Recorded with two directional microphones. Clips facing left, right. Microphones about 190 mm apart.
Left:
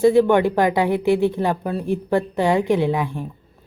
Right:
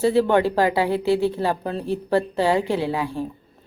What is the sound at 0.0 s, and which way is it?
Speech, 15° left (ahead or behind).